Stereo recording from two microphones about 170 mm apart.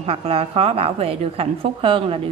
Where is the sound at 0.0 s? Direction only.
35° right (ahead or behind).